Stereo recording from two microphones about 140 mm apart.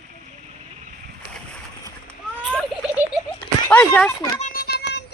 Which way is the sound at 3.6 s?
15° left (ahead or behind).